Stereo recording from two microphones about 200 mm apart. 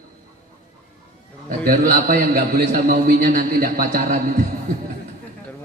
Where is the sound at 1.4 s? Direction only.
45° right (ahead or behind).